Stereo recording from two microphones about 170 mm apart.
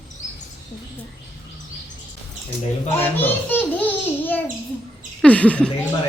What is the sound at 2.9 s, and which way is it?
A woman's voice, 10° left (ahead or behind).